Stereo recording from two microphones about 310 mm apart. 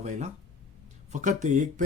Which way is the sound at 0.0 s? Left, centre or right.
Right.